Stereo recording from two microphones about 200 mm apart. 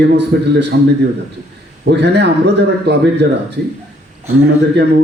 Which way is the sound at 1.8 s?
60° right (ahead or behind).